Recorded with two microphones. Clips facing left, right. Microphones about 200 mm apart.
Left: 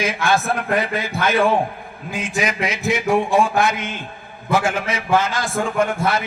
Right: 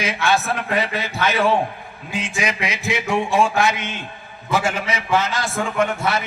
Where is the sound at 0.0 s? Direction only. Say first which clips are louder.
Left 1 dB; 50° left (ahead or behind).